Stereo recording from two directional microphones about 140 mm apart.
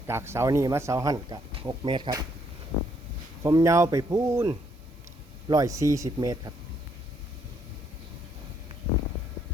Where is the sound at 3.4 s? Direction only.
25° right (ahead or behind).